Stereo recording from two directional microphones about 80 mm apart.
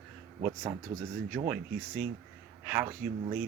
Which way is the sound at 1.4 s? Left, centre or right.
Right.